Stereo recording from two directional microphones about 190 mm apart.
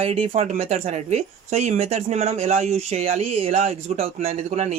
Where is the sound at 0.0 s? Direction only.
35° right (ahead or behind).